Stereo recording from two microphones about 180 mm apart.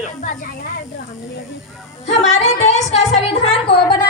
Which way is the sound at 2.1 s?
40° left (ahead or behind).